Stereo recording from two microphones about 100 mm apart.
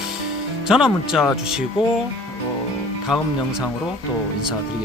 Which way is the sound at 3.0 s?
5° right (ahead or behind).